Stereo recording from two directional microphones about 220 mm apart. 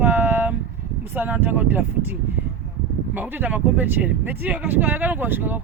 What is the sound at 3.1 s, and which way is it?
Speech, 10° right (ahead or behind).